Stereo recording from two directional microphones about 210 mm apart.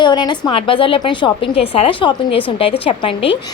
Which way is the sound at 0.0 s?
20° left (ahead or behind).